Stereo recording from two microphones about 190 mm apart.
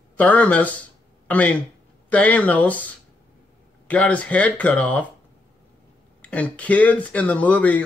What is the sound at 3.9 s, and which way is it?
Speech, 5° left (ahead or behind).